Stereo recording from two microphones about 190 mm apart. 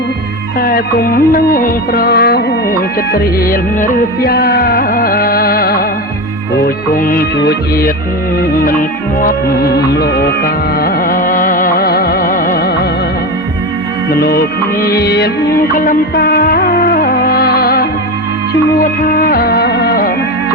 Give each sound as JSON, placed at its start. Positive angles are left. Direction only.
{"t": 0.6, "sound": "music", "side_deg": 50}
{"t": 6.9, "sound": "music", "side_deg": 50}
{"t": 14.1, "sound": "music", "side_deg": 55}
{"t": 16.1, "sound": "music of bollywood", "side_deg": 55}
{"t": 18.8, "sound": "music", "side_deg": 50}